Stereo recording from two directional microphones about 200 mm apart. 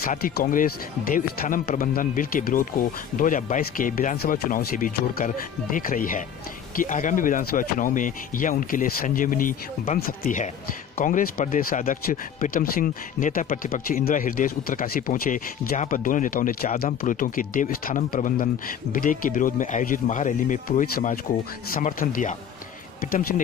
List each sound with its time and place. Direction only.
0.0 s speech: 45° left (ahead or behind)